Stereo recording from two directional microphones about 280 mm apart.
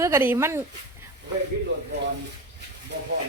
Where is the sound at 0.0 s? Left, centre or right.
Centre.